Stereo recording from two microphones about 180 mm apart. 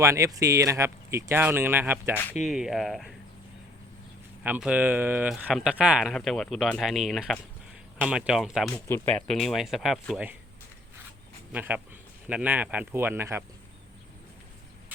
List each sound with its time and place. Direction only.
0.0 s speech: 15° right (ahead or behind); by 3.2 s centre (ahead or behind)
4.4 s speech: 10° right (ahead or behind)
8.7 s speech: 15° left (ahead or behind)
9.1 s speech: 5° left (ahead or behind)
11.5 s speech: 10° right (ahead or behind)